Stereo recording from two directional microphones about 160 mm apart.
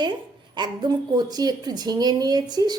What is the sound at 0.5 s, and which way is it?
A woman's voice, 25° right (ahead or behind).